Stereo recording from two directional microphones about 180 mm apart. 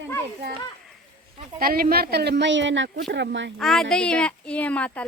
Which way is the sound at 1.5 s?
55° right (ahead or behind).